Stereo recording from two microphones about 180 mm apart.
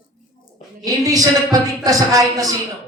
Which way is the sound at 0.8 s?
20° right (ahead or behind).